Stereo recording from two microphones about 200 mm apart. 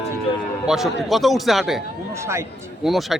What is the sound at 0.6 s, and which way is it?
A man's voice, centre (ahead or behind).